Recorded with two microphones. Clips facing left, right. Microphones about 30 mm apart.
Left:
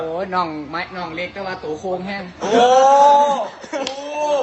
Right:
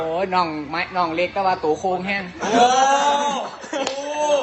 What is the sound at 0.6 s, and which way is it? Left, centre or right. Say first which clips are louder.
A man's voice: right 4 dB; right.